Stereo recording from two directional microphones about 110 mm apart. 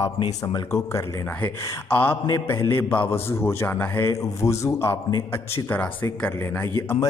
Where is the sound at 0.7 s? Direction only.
25° left (ahead or behind).